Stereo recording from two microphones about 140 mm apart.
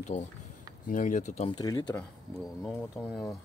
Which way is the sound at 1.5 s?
30° left (ahead or behind).